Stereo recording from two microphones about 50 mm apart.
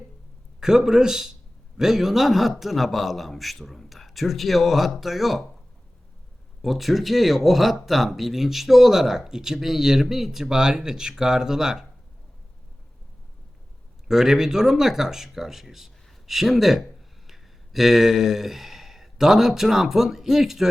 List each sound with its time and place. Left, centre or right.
0.6 s speech: centre
6.6 s speech: centre
14.1 s speech: centre